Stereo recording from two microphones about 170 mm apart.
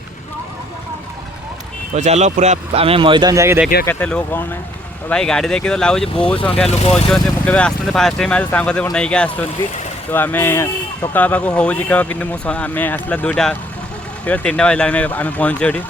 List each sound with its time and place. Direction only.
2.0 s speech: 40° right (ahead or behind); by 3.6 s 15° right (ahead or behind)
3.8 s speech: 10° left (ahead or behind)
6.7 s speech: 40° left (ahead or behind)
7.1 s speech: 5° left (ahead or behind)